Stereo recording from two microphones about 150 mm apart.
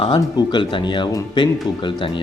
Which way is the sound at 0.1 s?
30° left (ahead or behind).